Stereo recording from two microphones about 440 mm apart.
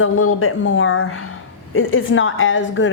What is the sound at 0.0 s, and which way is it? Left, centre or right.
A woman's voice, left.